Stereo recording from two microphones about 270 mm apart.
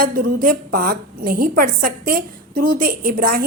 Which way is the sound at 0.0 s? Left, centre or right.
Right.